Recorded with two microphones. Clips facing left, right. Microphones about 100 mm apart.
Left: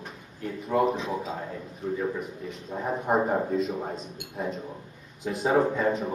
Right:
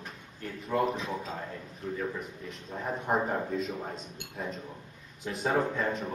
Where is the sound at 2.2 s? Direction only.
Centre (ahead or behind).